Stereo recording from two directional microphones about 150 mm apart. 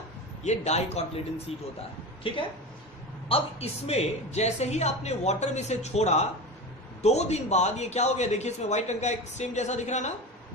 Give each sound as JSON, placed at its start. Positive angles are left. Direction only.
{"t": 0.4, "sound": "a man's voice", "side_deg": 45}
{"t": 2.3, "sound": "a woman's voice", "side_deg": 35}